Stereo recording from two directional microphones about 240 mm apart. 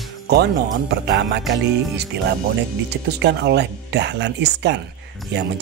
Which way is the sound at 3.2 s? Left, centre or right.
Right.